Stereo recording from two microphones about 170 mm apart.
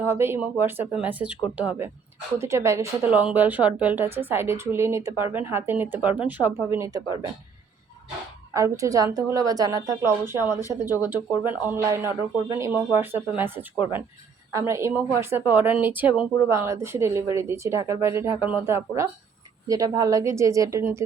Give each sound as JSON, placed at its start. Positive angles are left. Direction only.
{"t": 0.0, "sound": "a woman's voice", "side_deg": -15}
{"t": 8.5, "sound": "speech", "side_deg": -20}
{"t": 10.3, "sound": "speech", "side_deg": 20}
{"t": 10.7, "sound": "a woman's voice", "side_deg": -10}